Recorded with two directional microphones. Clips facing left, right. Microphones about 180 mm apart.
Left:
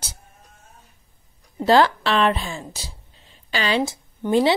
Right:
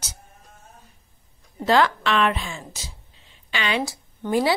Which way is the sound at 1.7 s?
35° left (ahead or behind).